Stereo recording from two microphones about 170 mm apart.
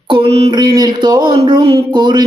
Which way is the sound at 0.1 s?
35° right (ahead or behind).